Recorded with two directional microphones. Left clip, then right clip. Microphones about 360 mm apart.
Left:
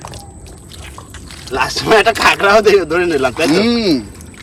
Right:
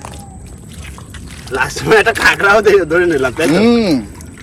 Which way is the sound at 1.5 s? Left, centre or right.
Left.